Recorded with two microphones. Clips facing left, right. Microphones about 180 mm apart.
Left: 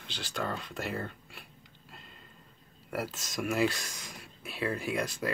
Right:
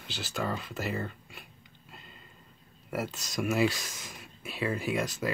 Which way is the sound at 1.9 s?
Centre (ahead or behind).